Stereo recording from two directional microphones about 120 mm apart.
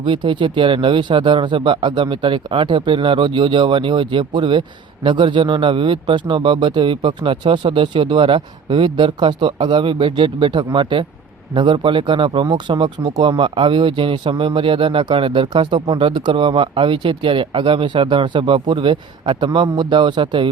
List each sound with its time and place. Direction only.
0.0 s speech: 45° right (ahead or behind)